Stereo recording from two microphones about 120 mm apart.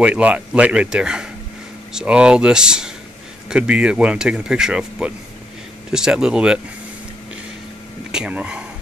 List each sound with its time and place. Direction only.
0.0 s speech: 10° right (ahead or behind)
8.1 s speech: 10° right (ahead or behind)